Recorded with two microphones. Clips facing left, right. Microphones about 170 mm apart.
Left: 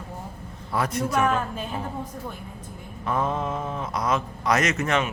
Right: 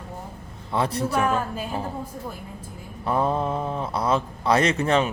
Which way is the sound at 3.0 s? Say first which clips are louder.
Right 3 dB; 35° right (ahead or behind).